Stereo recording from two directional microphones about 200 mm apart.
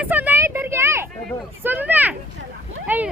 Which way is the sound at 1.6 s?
10° right (ahead or behind).